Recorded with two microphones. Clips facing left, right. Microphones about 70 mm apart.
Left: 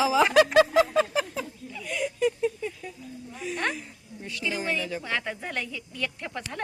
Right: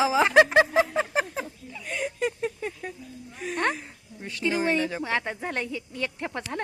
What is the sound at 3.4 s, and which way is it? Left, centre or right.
A woman's voice, right.